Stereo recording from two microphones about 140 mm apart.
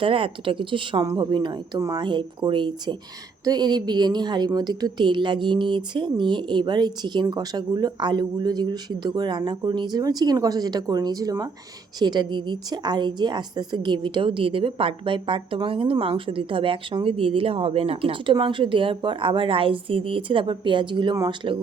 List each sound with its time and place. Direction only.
0.0 s a woman's voice: 40° right (ahead or behind)